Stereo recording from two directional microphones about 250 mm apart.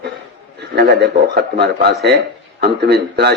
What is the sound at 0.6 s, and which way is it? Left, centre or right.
A man's voice, right.